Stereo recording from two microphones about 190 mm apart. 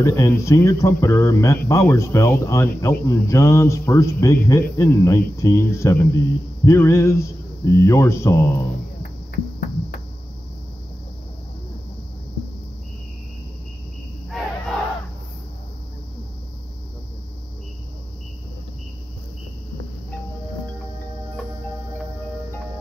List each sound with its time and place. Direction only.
0.0 s speech: 15° left (ahead or behind)